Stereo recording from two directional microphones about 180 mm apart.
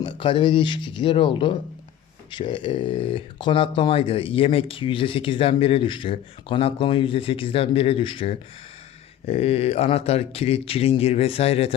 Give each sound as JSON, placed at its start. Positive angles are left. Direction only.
{"t": 0.0, "sound": "speech", "side_deg": 25}